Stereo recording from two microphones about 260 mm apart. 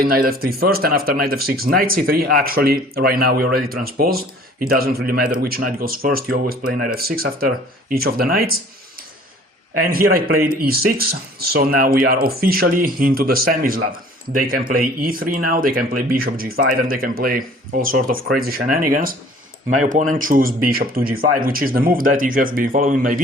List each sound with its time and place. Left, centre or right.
0.0 s speech: right
9.8 s speech: right